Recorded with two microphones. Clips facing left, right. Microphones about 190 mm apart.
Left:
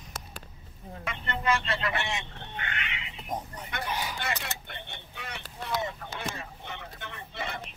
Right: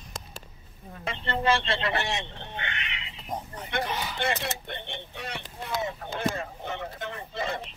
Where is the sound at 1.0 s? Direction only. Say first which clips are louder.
Right 5 dB; 30° right (ahead or behind).